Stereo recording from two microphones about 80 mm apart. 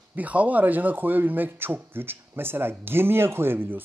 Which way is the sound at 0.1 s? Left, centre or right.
Centre.